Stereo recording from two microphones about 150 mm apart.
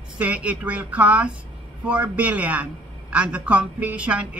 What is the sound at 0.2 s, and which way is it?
A man's voice, 10° right (ahead or behind).